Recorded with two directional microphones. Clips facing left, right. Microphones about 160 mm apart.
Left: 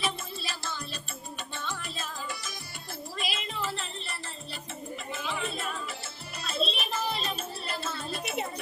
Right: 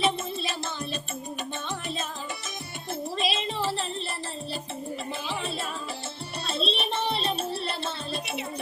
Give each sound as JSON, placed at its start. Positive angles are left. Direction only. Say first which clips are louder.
{"t": 0.0, "sound": "music", "louder": "right 7 dB", "side_deg": -25}
{"t": 3.2, "sound": "a sound", "louder": "right 5 dB", "side_deg": -25}
{"t": 5.2, "sound": "music", "louder": "right 2 dB", "side_deg": -30}